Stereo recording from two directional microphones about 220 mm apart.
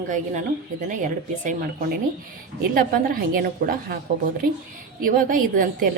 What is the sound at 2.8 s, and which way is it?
A woman's voice, 40° right (ahead or behind).